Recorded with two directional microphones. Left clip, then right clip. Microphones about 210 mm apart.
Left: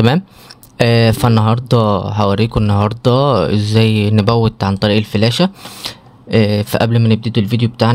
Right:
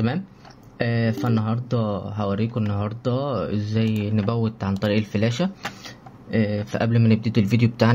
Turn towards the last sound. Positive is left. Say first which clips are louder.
# left 5 dB
turn(degrees=20)  # may be behind; listen again after turning